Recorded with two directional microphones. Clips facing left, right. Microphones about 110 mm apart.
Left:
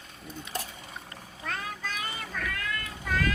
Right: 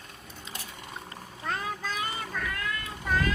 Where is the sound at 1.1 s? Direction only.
30° right (ahead or behind).